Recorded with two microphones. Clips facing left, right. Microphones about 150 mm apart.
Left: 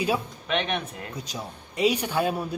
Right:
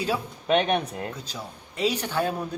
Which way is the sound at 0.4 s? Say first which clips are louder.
Right 8 dB; 40° right (ahead or behind).